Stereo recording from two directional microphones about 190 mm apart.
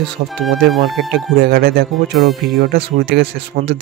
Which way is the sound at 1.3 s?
55° right (ahead or behind).